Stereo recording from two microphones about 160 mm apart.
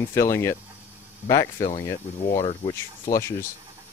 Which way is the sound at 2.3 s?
40° left (ahead or behind).